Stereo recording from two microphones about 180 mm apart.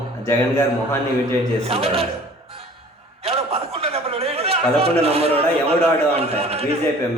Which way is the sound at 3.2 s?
35° right (ahead or behind).